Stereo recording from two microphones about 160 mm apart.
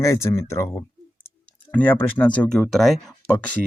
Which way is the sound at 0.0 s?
15° left (ahead or behind).